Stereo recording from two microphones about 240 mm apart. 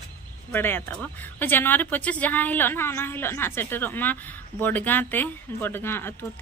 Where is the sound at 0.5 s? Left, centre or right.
Centre.